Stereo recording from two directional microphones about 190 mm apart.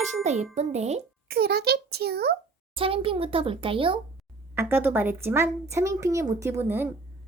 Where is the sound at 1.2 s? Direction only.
55° right (ahead or behind).